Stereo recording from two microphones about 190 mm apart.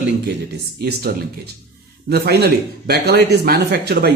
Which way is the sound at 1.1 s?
50° right (ahead or behind).